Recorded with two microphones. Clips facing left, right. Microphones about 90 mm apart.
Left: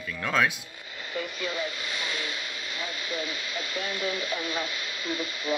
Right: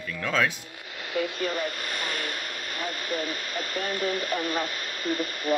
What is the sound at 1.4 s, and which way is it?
Speech, 50° right (ahead or behind).